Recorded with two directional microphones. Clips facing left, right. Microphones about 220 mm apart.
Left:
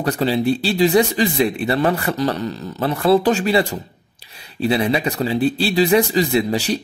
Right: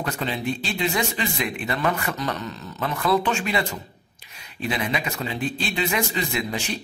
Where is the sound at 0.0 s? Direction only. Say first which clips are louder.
Left 9 dB; 35° left (ahead or behind).